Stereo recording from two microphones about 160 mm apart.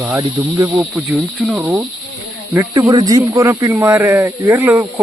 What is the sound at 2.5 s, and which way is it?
Speech, 20° right (ahead or behind).